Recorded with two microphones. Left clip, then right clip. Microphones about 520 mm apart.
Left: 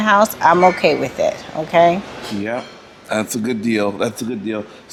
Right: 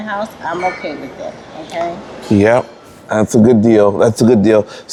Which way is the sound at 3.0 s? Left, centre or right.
Right.